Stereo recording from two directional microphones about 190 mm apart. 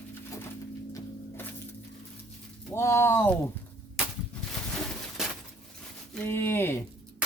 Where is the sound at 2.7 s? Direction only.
15° left (ahead or behind).